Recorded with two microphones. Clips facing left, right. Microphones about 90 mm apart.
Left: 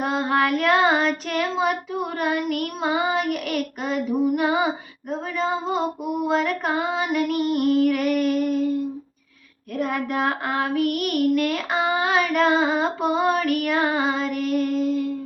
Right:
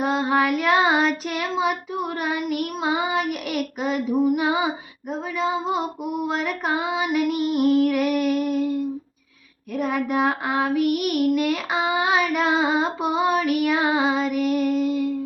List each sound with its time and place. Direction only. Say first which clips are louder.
0.0 s child singing: right 1 dB; 5° right (ahead or behind)
5.4 s female singing: even; 5° right (ahead or behind)
9.7 s female singing: right 2 dB; 5° right (ahead or behind)